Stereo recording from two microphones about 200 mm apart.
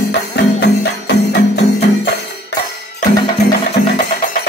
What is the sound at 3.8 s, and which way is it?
Music, 55° left (ahead or behind).